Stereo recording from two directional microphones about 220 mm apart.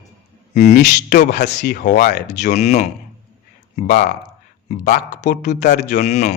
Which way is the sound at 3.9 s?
50° left (ahead or behind).